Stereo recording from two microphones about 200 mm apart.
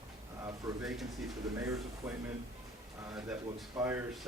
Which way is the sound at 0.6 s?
15° right (ahead or behind).